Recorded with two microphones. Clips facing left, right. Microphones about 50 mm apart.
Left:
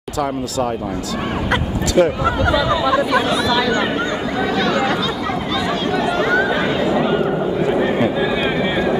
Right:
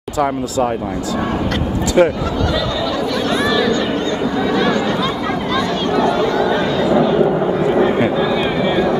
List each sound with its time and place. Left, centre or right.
2.0 s speech: right
2.4 s speech: centre
5.9 s chatter: centre
6.2 s chatter: left
7.6 s vehicle: centre
8.2 s a sound: centre